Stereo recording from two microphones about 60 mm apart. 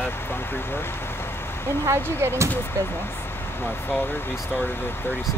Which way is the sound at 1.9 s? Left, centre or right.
Right.